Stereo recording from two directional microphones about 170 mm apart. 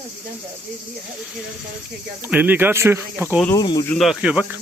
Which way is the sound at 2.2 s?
10° right (ahead or behind).